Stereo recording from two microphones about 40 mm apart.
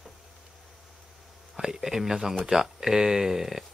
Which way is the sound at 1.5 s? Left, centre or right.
Centre.